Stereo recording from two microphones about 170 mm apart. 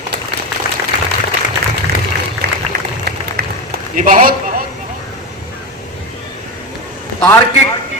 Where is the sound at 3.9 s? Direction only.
50° right (ahead or behind).